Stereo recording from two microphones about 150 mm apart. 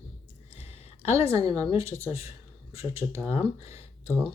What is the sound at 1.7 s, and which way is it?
Speech, 20° right (ahead or behind).